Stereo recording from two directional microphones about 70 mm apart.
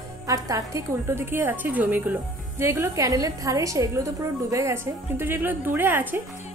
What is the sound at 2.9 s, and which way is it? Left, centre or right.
A woman's voice, right.